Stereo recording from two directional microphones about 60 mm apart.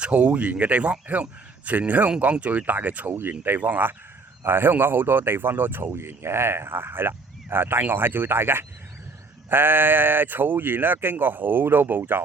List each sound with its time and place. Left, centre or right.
0.0 s speech: right
3.1 s speech: right